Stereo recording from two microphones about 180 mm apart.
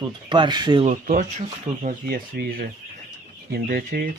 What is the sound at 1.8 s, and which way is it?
Speech, 60° right (ahead or behind).